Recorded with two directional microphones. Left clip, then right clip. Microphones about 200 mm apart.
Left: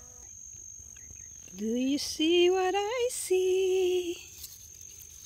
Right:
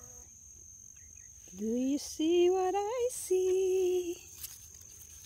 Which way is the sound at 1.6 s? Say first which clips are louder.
Left 3 dB; 5° left (ahead or behind).